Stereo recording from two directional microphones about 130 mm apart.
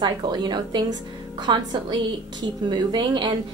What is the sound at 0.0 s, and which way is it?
A woman's voice, 35° right (ahead or behind).